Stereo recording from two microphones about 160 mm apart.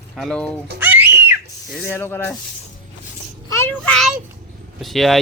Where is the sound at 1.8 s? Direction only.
15° left (ahead or behind).